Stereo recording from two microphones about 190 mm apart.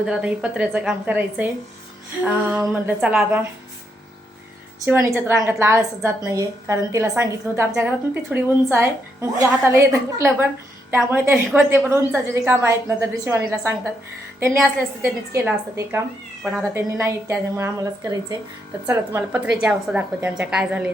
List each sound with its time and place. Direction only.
0.0 s a woman's voice: 5° right (ahead or behind)
4.9 s a woman's voice: 10° right (ahead or behind)
15.3 s a woman's voice: 15° right (ahead or behind)
16.4 s a woman's voice: centre (ahead or behind)
16.7 s a woman's voice: 15° right (ahead or behind)